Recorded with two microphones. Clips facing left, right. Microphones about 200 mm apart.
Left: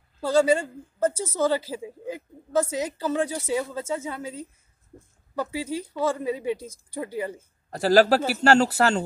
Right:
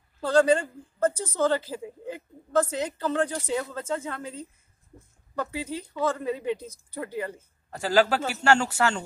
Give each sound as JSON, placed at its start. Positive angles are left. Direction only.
{"t": 0.2, "sound": "a woman's voice", "side_deg": 10}
{"t": 7.7, "sound": "speech", "side_deg": 40}